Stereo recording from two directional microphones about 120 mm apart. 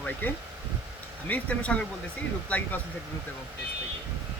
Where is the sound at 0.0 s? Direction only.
15° left (ahead or behind).